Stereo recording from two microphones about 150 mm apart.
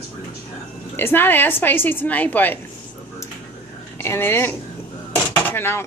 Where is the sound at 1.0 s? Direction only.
15° left (ahead or behind).